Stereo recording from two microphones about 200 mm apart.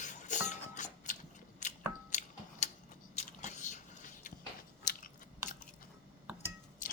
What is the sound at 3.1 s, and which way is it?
Biting, 35° left (ahead or behind).